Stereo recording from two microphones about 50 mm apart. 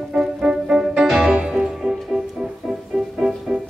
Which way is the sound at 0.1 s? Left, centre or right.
Centre.